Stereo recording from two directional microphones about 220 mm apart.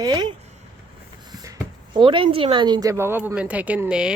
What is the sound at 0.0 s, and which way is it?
Speech, 20° right (ahead or behind).